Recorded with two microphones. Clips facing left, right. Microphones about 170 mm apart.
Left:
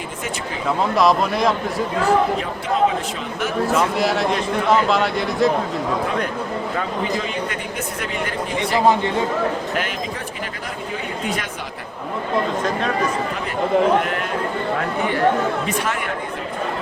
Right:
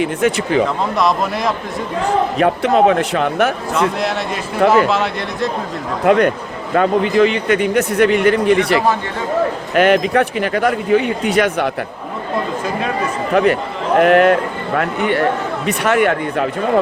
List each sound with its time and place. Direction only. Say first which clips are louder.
0.0 s a man's voice: right 12 dB; 75° right (ahead or behind)
0.9 s a man's voice: left 1 dB; centre (ahead or behind)
2.4 s a man's voice: right 7 dB; 70° right (ahead or behind)
4.7 s a man's voice: right 3 dB; centre (ahead or behind)
6.1 s a man's voice: right 10 dB; 75° right (ahead or behind)
13.3 s a man's voice: right 7 dB; 75° right (ahead or behind)